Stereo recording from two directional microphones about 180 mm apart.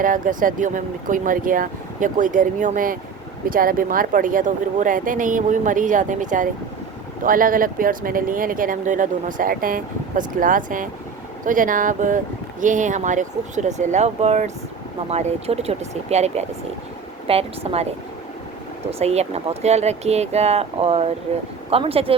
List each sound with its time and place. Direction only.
0.0 s speech: 50° right (ahead or behind)
18.9 s speech: 35° right (ahead or behind)